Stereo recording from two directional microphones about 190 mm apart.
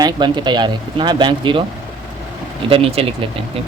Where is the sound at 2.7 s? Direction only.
30° right (ahead or behind).